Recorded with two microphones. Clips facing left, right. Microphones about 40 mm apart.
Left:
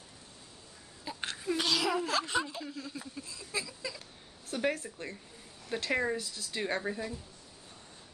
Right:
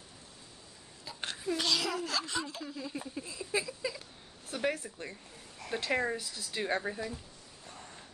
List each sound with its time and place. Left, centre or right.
1.2 s a sound: centre
2.0 s speech: left
2.8 s speech: centre
4.5 s speech: centre